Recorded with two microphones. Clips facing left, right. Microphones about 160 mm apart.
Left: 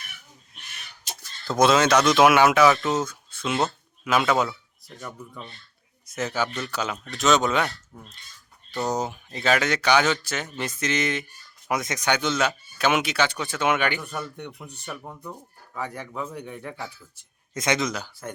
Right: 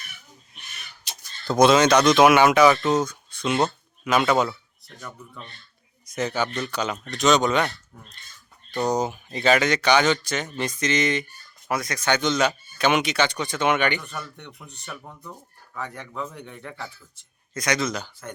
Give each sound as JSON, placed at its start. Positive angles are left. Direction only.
{"t": 1.1, "sound": "a sound", "side_deg": 45}
{"t": 1.5, "sound": "speech", "side_deg": 0}
{"t": 8.7, "sound": "speech", "side_deg": 0}
{"t": 11.7, "sound": "speech", "side_deg": 20}
{"t": 17.5, "sound": "speech", "side_deg": 20}
{"t": 17.8, "sound": "speech", "side_deg": 10}